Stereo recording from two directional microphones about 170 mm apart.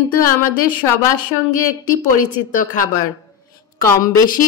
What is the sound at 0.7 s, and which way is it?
A woman's voice, 55° left (ahead or behind).